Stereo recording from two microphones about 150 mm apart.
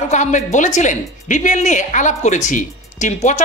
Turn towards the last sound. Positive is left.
turn(degrees=50)  # may be behind; listen again after turning